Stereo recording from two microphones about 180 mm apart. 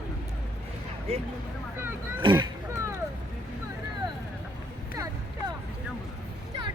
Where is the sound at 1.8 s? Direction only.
10° right (ahead or behind).